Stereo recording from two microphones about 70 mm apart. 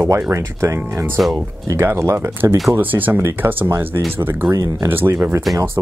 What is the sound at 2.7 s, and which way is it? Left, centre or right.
Speech, right.